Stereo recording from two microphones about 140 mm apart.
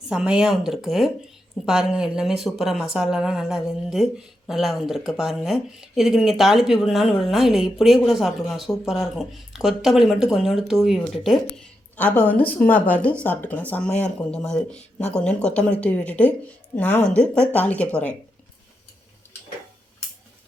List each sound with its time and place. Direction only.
0.1 s a woman's voice: 5° right (ahead or behind); by 18.1 s 10° left (ahead or behind)